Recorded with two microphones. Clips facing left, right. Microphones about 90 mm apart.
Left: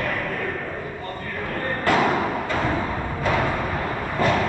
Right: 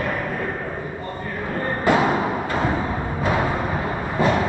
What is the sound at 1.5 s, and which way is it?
Music, 15° right (ahead or behind).